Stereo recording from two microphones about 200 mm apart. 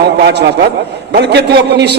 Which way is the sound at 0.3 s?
55° right (ahead or behind).